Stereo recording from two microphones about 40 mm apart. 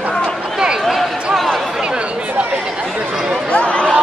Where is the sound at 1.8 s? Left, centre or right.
Right.